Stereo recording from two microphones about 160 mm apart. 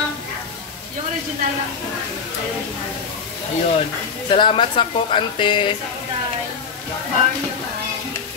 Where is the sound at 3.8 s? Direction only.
35° left (ahead or behind).